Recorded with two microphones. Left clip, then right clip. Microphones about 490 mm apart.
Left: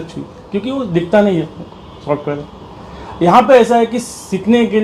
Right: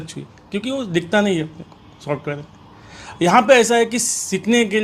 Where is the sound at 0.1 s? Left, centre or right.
Right.